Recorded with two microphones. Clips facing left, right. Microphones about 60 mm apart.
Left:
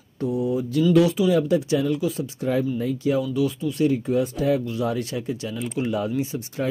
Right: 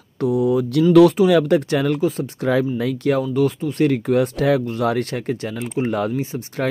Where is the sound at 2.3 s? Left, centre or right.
Right.